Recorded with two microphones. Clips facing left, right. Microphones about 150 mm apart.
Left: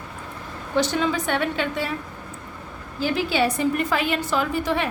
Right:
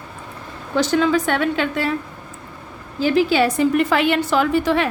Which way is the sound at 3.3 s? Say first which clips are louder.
Right 5 dB; 85° right.